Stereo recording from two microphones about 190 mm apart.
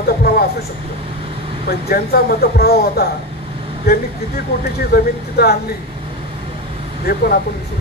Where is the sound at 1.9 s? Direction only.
55° left (ahead or behind).